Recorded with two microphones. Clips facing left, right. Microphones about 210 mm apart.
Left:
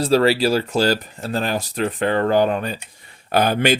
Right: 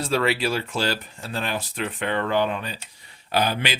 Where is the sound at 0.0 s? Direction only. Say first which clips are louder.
Left 7 dB; 35° left (ahead or behind).